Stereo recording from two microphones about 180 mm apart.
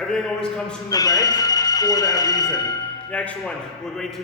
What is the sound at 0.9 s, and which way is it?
Speech, 20° left (ahead or behind).